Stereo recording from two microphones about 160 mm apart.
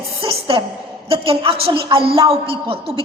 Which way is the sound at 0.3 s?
35° right (ahead or behind).